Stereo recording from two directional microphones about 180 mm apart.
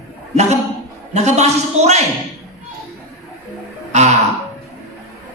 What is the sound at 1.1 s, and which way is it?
Speech, 40° right (ahead or behind).